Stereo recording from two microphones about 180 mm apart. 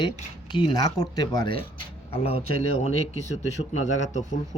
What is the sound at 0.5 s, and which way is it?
Speech, 25° left (ahead or behind).